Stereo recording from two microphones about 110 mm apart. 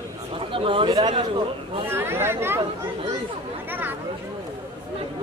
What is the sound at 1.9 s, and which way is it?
Speech, 20° right (ahead or behind).